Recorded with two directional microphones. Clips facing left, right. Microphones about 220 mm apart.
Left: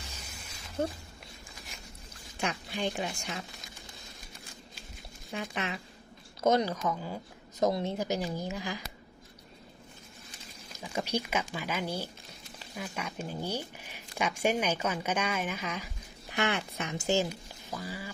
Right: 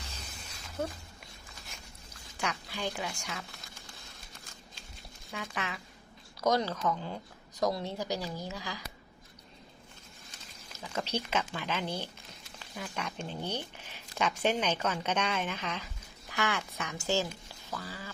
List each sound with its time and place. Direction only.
0.8 s speech: 30° left (ahead or behind)
2.4 s speech: 20° left (ahead or behind)
5.3 s speech: 25° left (ahead or behind); by 7.2 s 10° left (ahead or behind)
7.6 s speech: 20° left (ahead or behind)
10.7 s speech: 10° left (ahead or behind)
16.3 s speech: 20° left (ahead or behind)
17.7 s duck: 15° left (ahead or behind)